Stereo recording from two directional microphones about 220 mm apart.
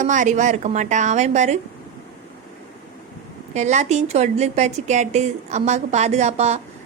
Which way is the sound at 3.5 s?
30° right (ahead or behind).